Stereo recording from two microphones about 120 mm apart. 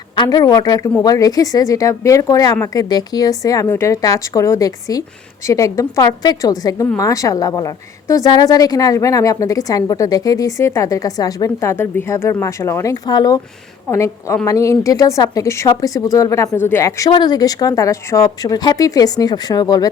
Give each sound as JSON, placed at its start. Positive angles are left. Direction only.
{"t": 0.2, "sound": "a woman's voice", "side_deg": 30}
{"t": 17.1, "sound": "speech", "side_deg": 35}